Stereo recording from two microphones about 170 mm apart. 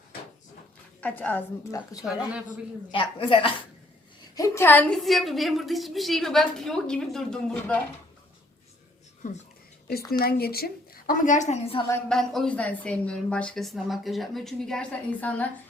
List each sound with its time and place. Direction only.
1.0 s a woman's voice: 10° left (ahead or behind)
2.9 s a woman's voice: 30° left (ahead or behind)
4.4 s a woman's voice: 15° left (ahead or behind)
10.2 s a woman's voice: 65° left (ahead or behind); by 11.9 s 35° left (ahead or behind)
12.0 s a woman's voice: centre (ahead or behind)